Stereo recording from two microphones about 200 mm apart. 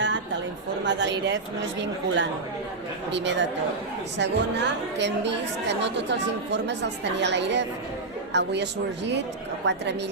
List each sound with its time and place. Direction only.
0.9 s a woman's voice: 60° right (ahead or behind)
9.6 s a woman's voice: 60° right (ahead or behind)